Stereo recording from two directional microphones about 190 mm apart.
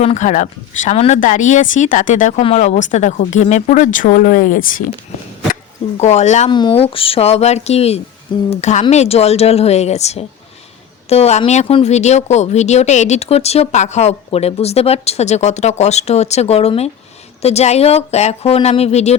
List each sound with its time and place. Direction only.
0.0 s speech: 40° left (ahead or behind)
6.0 s speech: 35° left (ahead or behind)
6.5 s speech: 25° left (ahead or behind)